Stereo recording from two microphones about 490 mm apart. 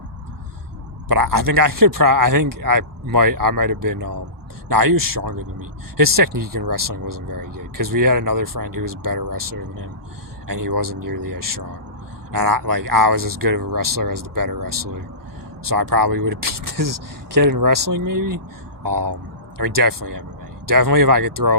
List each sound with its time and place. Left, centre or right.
1.0 s speech: right